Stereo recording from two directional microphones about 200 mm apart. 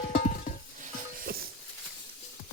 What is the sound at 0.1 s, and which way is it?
Stir, 45° left (ahead or behind).